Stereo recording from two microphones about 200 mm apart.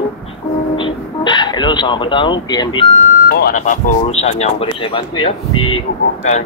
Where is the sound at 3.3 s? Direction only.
50° left (ahead or behind); by 5.3 s 25° left (ahead or behind).